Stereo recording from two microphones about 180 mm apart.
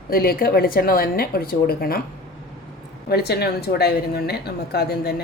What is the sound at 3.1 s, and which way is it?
A woman's voice, 65° left (ahead or behind).